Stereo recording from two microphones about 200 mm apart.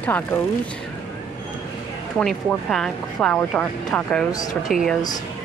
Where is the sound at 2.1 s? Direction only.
5° left (ahead or behind).